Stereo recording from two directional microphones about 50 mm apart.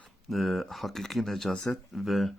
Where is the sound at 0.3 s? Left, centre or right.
Centre.